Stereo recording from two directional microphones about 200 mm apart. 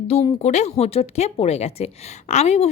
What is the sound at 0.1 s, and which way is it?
Speech, 30° left (ahead or behind).